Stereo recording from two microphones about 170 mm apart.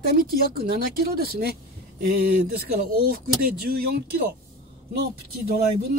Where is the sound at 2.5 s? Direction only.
60° right (ahead or behind).